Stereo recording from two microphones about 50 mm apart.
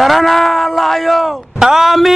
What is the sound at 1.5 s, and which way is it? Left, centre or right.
Speech, centre.